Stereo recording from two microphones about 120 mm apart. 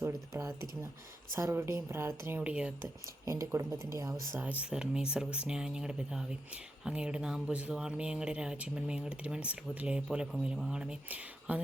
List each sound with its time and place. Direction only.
0.0 s speech: 20° right (ahead or behind)
3.2 s speech: 25° right (ahead or behind)
4.4 s speech: 10° right (ahead or behind)